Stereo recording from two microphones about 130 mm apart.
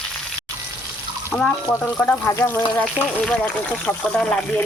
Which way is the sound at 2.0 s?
15° left (ahead or behind).